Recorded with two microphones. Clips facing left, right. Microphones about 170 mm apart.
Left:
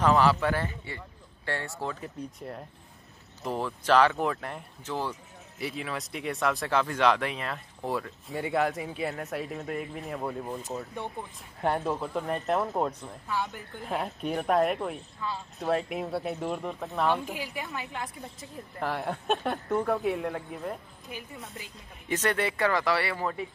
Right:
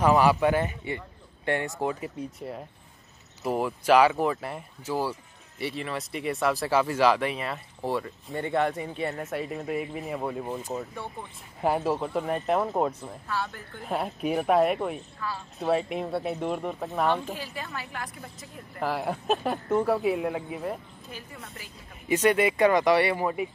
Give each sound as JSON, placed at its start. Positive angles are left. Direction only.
{"t": 0.0, "sound": "a man's voice", "side_deg": -15}
{"t": 13.3, "sound": "a woman's voice", "side_deg": 15}
{"t": 13.8, "sound": "speech", "side_deg": -5}
{"t": 15.2, "sound": "speech", "side_deg": 20}
{"t": 15.6, "sound": "speech", "side_deg": 0}
{"t": 17.1, "sound": "a woman's voice", "side_deg": 10}
{"t": 18.8, "sound": "speech", "side_deg": -5}
{"t": 21.1, "sound": "a woman's voice", "side_deg": 15}
{"t": 22.0, "sound": "a man's voice", "side_deg": -10}